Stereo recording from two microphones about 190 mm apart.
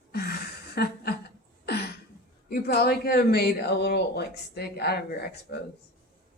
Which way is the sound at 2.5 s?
55° left (ahead or behind).